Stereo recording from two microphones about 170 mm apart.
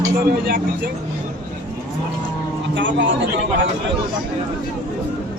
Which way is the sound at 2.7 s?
90° right.